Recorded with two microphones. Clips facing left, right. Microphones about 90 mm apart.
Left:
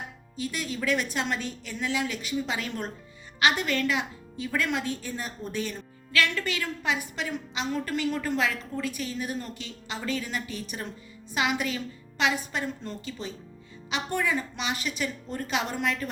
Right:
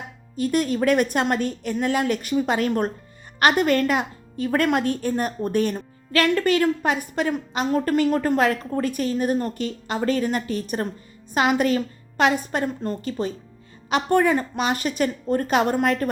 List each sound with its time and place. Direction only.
0.3 s speech: 50° right (ahead or behind)